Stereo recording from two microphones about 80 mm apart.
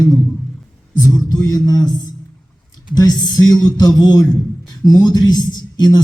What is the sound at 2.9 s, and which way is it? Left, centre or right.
A man's voice, left.